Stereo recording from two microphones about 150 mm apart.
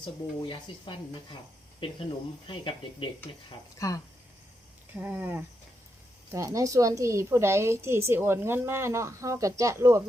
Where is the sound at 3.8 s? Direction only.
20° left (ahead or behind).